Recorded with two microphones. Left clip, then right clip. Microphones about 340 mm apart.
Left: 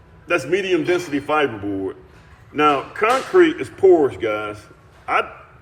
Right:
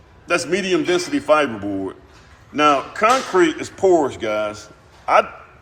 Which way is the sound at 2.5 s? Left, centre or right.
Centre.